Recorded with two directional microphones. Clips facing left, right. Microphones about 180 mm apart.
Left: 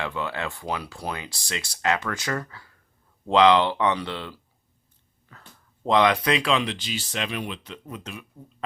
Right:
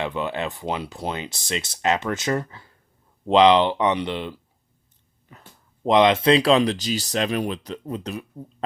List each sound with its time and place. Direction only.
0.0 s speech: 20° right (ahead or behind)
5.3 s a sound: 20° right (ahead or behind)
5.8 s speech: 20° right (ahead or behind)